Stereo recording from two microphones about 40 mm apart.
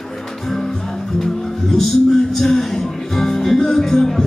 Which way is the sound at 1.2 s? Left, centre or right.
Centre.